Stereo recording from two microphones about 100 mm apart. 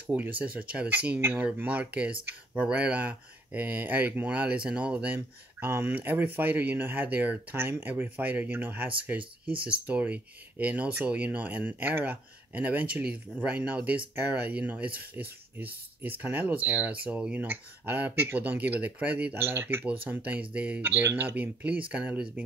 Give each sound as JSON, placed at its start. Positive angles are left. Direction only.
{"t": 0.0, "sound": "speech", "side_deg": -15}